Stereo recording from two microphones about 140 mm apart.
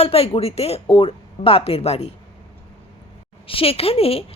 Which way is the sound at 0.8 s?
35° left (ahead or behind).